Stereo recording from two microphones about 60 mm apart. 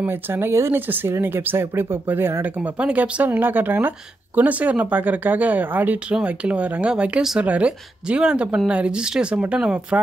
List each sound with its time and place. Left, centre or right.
0.0 s speech: right
0.7 s speech: right
2.6 s speech: right
6.9 s speech: centre